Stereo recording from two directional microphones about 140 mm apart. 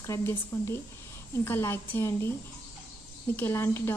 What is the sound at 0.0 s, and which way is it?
A woman's voice, 20° left (ahead or behind).